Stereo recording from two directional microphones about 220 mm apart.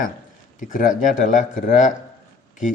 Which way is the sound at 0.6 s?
35° left (ahead or behind).